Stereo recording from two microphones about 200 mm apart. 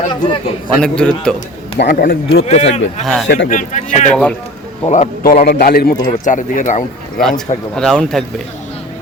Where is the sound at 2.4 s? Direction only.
30° left (ahead or behind).